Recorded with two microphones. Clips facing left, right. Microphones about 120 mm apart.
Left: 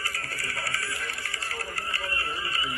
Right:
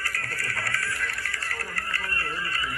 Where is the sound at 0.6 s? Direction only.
20° left (ahead or behind).